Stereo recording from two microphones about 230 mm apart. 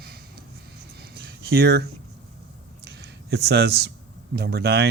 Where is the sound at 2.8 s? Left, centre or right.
Right.